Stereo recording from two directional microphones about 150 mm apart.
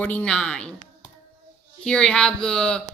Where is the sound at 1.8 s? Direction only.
5° left (ahead or behind).